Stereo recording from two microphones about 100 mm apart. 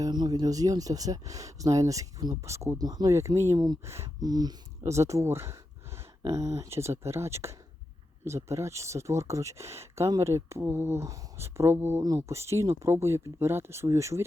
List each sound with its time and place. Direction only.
0.0 s speech: 45° right (ahead or behind)
4.2 s speech: 40° right (ahead or behind)